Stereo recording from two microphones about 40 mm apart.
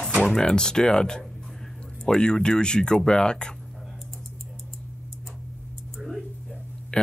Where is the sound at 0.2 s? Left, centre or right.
Left.